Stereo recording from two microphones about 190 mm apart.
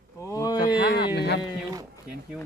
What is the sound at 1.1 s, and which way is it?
Speech, 60° left (ahead or behind).